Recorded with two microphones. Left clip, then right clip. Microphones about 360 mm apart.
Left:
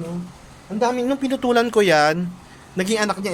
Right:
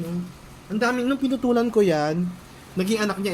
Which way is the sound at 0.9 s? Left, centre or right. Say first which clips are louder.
Left 2 dB; centre.